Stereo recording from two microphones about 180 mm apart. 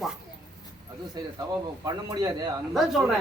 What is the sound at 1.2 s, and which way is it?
A man's voice, 25° right (ahead or behind).